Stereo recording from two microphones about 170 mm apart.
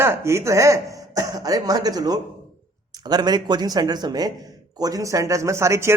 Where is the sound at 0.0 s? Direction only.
15° right (ahead or behind).